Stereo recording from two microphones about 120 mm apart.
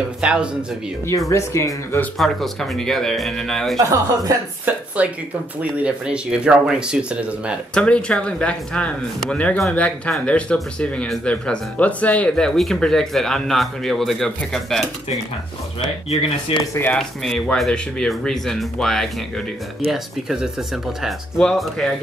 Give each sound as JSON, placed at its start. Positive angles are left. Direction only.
{"t": 0.2, "sound": "speech", "side_deg": -10}
{"t": 1.3, "sound": "speech", "side_deg": 25}
{"t": 2.1, "sound": "speech", "side_deg": 0}
{"t": 3.7, "sound": "speech", "side_deg": -30}
{"t": 4.6, "sound": "speech", "side_deg": -10}
{"t": 7.7, "sound": "speech", "side_deg": 10}
{"t": 16.1, "sound": "speech", "side_deg": 55}
{"t": 16.9, "sound": "speech", "side_deg": 5}